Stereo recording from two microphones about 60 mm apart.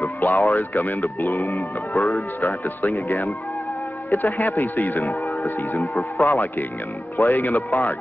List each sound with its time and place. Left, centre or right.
0.2 s speech: left
0.6 s speech: left
1.3 s music: left
2.1 s speech: left
6.1 s speech: left